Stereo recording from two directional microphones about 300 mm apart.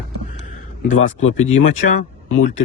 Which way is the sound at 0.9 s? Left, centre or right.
Left.